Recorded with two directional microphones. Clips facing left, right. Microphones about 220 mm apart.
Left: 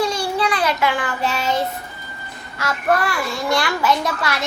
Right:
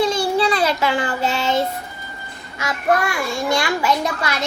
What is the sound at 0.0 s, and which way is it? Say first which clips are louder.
Child singing: right 3 dB; 25° right (ahead or behind).